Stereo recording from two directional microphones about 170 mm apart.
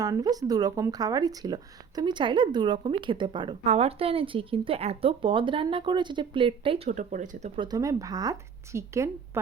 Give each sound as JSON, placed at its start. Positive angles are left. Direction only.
{"t": 0.0, "sound": "a woman's voice", "side_deg": -20}
{"t": 7.5, "sound": "speech", "side_deg": -25}